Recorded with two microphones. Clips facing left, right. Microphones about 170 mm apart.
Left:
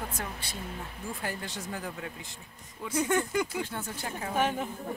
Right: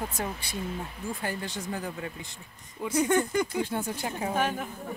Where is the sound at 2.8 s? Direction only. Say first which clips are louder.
Right 4 dB; 15° right (ahead or behind).